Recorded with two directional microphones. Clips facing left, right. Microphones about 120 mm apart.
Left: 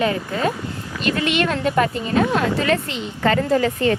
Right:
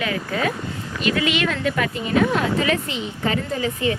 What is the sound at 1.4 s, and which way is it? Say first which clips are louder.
Speech: left 3 dB; 40° left (ahead or behind).